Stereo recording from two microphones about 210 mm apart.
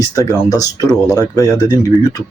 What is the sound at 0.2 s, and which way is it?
Speech, 15° left (ahead or behind).